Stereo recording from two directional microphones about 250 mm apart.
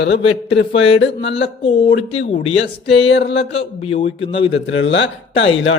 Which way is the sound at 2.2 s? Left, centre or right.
Left.